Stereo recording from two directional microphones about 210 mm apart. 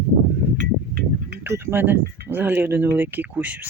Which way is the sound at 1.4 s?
10° right (ahead or behind).